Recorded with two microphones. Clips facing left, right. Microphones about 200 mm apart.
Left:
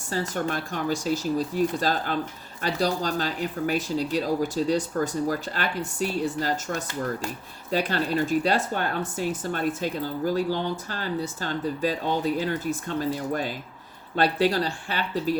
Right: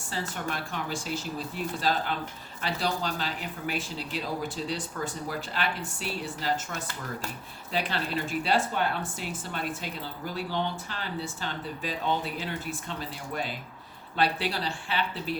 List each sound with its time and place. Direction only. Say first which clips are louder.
0.1 s speech: left 6 dB; 45° left (ahead or behind)